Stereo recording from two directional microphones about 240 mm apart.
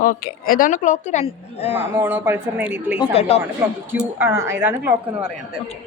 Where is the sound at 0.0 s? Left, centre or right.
Left.